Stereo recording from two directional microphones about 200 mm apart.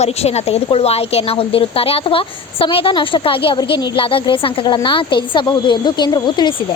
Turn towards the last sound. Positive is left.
turn(degrees=25)  # may be behind; listen again after turning